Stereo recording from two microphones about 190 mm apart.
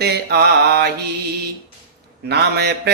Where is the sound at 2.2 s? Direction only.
60° right (ahead or behind).